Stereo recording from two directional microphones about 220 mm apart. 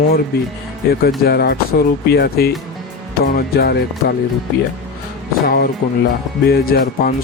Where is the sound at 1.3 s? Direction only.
45° left (ahead or behind).